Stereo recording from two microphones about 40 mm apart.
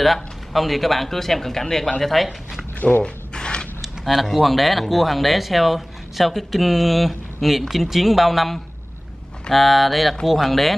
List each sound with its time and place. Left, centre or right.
0.0 s speech: centre
3.0 s mechanisms: left
3.8 s speech: centre